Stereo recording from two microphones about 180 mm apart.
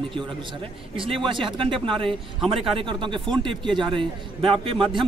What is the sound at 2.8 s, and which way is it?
Speech, 25° right (ahead or behind).